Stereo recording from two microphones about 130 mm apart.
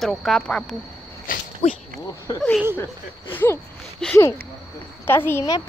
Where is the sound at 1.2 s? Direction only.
90° left.